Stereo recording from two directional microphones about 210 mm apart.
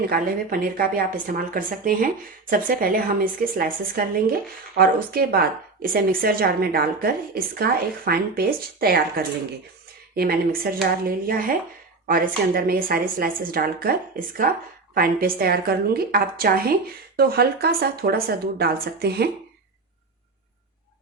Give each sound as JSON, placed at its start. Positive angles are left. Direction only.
{"t": 0.0, "sound": "a woman's voice", "side_deg": -45}